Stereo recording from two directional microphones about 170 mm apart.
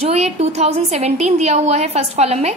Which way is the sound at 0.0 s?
40° right (ahead or behind).